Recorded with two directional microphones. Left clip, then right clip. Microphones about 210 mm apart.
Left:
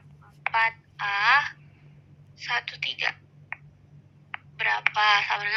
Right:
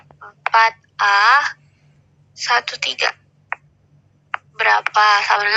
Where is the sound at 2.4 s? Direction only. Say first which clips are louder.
Right 10 dB; 45° right (ahead or behind).